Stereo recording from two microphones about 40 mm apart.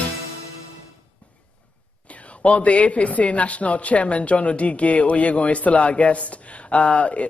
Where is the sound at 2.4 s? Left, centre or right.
Left.